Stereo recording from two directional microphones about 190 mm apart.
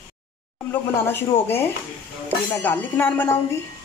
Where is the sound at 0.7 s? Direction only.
10° left (ahead or behind).